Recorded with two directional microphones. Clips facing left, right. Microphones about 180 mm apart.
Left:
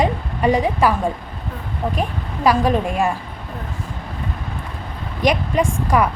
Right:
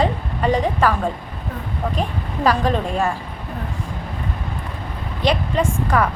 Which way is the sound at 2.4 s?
10° left (ahead or behind).